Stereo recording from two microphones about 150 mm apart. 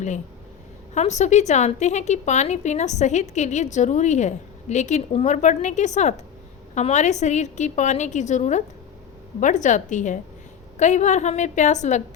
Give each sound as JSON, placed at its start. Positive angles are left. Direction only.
{"t": 0.9, "sound": "a woman's voice", "side_deg": 50}